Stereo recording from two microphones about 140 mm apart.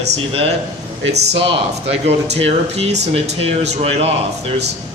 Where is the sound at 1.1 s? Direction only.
45° right (ahead or behind).